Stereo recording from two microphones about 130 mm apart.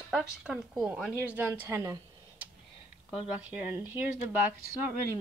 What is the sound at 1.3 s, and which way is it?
Speech, 15° right (ahead or behind).